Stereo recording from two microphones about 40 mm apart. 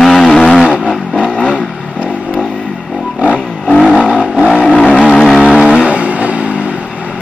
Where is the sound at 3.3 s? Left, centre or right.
Centre.